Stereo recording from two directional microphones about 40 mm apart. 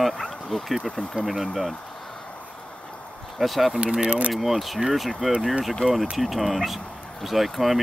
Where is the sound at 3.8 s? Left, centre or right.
Right.